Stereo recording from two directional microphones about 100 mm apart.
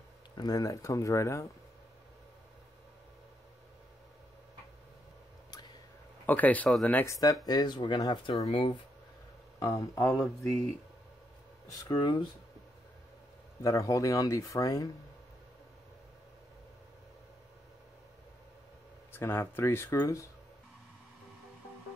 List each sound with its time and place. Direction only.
0.4 s speech: 40° left (ahead or behind)
6.2 s speech: 15° left (ahead or behind)
7.1 s speech: 35° left (ahead or behind)
8.5 s speech: 60° left (ahead or behind)
9.6 s speech: 35° left (ahead or behind)
11.6 s speech: 40° left (ahead or behind)
13.6 s speech: 35° left (ahead or behind)
19.1 s speech: 25° left (ahead or behind)